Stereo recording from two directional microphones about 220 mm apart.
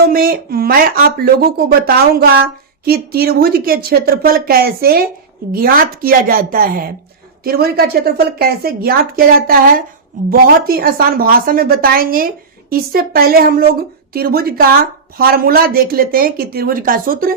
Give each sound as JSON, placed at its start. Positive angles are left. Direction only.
{"t": 0.0, "sound": "speech", "side_deg": -40}